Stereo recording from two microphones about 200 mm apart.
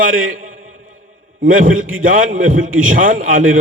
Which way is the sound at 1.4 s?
45° right (ahead or behind).